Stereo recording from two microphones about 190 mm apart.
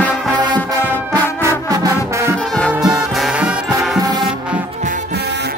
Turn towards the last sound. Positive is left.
turn(degrees=-5)  # may be behind; listen again after turning